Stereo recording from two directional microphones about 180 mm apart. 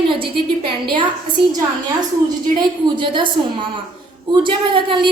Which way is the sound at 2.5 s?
25° right (ahead or behind).